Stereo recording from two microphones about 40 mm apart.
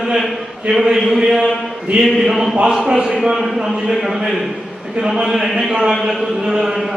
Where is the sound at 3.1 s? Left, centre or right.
Centre.